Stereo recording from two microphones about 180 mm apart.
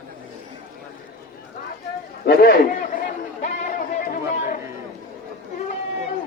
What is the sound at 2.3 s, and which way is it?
Speech, 55° left (ahead or behind).